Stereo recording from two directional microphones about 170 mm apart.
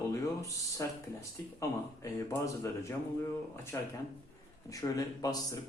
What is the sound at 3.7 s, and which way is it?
Speech, 15° left (ahead or behind).